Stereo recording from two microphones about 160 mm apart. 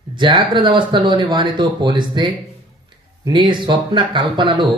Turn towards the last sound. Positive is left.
turn(degrees=-30)  # may be behind; listen again after turning